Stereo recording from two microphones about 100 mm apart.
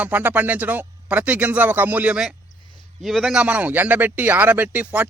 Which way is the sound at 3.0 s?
Centre (ahead or behind).